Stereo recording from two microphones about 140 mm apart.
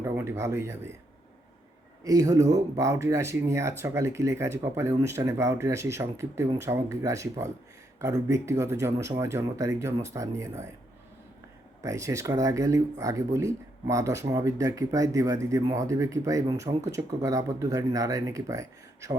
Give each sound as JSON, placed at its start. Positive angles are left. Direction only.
{"t": 0.0, "sound": "speech", "side_deg": -15}
{"t": 2.0, "sound": "speech", "side_deg": -25}
{"t": 11.8, "sound": "speech", "side_deg": -20}